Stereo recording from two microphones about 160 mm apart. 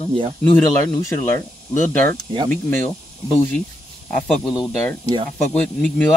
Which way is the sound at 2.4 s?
10° left (ahead or behind).